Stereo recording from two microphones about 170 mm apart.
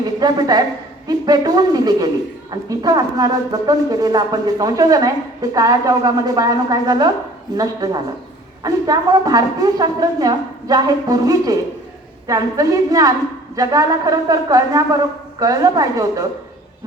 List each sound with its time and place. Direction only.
0.0 s a woman's voice: 25° right (ahead or behind)